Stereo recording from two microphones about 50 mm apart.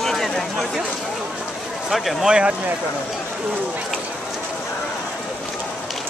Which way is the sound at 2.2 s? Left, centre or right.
Centre.